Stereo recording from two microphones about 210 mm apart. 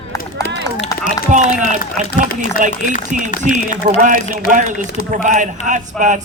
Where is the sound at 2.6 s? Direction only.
40° right (ahead or behind).